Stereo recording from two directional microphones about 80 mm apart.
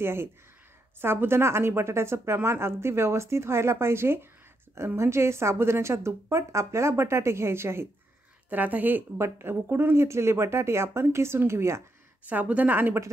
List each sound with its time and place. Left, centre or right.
0.0 s a woman's voice: right
8.5 s a woman's voice: right
12.3 s a woman's voice: centre